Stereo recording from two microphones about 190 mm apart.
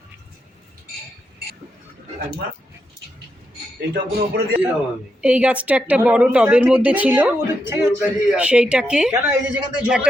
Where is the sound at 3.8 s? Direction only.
60° right (ahead or behind).